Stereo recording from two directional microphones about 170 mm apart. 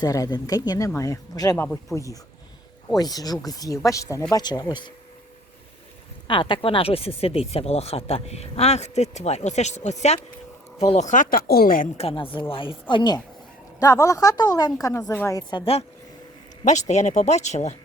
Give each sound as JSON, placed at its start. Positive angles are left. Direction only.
{"t": 0.0, "sound": "speech", "side_deg": 20}
{"t": 3.0, "sound": "speech", "side_deg": 20}
{"t": 6.2, "sound": "speech", "side_deg": 30}
{"t": 11.9, "sound": "speech", "side_deg": 35}
{"t": 16.9, "sound": "speech", "side_deg": 45}